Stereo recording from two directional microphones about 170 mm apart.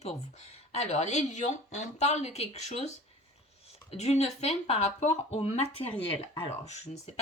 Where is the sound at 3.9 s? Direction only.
40° left (ahead or behind).